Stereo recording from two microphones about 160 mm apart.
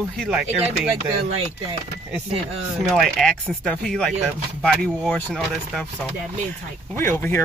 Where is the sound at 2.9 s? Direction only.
Centre (ahead or behind).